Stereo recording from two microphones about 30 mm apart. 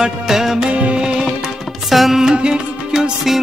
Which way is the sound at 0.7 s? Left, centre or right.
Right.